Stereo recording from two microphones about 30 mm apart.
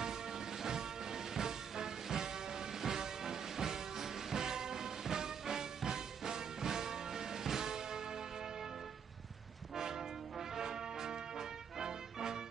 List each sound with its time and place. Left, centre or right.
0.0 s music: centre
9.8 s train: centre
10.5 s music: right